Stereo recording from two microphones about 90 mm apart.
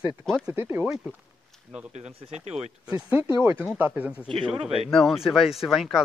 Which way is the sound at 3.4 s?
25° right (ahead or behind).